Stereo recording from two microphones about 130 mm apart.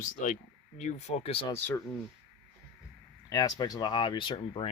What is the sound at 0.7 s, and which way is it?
Speech, 60° left (ahead or behind).